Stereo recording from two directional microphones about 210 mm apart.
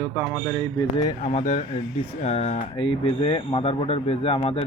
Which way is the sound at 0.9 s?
30° left (ahead or behind).